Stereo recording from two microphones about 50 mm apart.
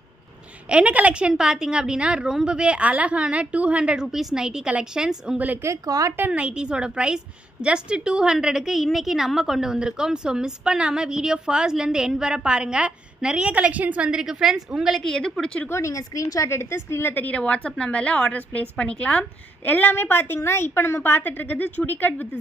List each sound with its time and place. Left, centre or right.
0.7 s a woman's voice: right
1.3 s a woman's voice: centre
5.6 s a woman's voice: right
6.3 s a woman's voice: right
14.1 s a woman's voice: centre
15.0 s a woman's voice: centre
15.7 s a woman's voice: left
16.5 s a woman's voice: left
17.1 s a woman's voice: left
17.4 s a woman's voice: left
19.6 s a woman's voice: left